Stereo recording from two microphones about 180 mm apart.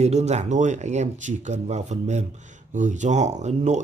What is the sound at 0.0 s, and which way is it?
Speech, 40° right (ahead or behind).